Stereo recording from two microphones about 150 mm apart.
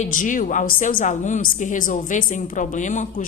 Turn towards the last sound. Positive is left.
turn(degrees=55)  # may be behind; listen again after turning